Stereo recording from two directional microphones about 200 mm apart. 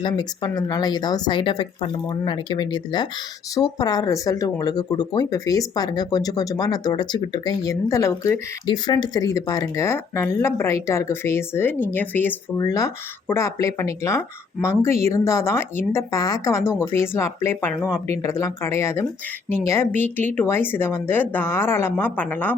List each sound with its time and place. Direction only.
0.0 s speech: 20° left (ahead or behind)